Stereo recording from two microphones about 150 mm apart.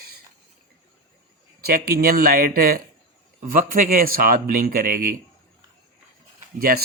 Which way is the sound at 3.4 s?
65° right (ahead or behind).